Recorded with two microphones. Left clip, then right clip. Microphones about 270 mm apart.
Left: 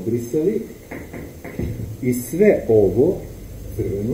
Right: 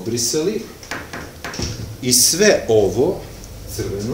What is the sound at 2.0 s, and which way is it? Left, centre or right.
Speech, right.